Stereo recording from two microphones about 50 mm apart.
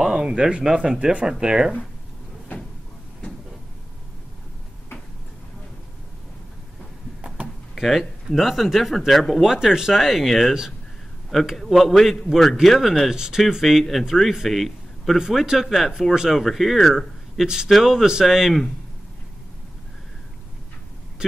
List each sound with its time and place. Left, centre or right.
0.0 s speech: centre
7.4 s door: right
7.7 s speech: centre
15.1 s speech: centre